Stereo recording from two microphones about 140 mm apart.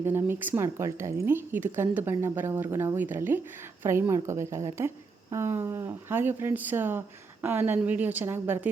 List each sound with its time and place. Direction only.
0.0 s speech: 15° right (ahead or behind)